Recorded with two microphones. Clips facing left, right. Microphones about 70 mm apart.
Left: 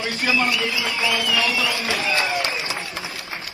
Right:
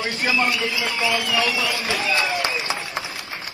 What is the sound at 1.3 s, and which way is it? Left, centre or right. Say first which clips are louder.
Speech: even; right.